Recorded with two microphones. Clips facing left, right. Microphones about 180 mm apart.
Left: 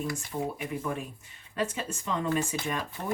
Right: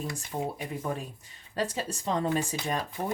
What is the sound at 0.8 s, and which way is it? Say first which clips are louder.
Speech: even; 35° right (ahead or behind).